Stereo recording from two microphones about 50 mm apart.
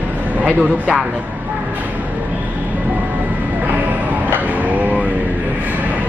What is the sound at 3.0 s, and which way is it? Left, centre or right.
Vehicle, right.